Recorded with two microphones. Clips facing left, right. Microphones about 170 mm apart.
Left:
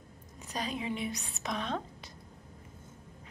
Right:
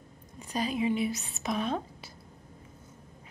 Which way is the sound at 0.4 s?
Centre (ahead or behind).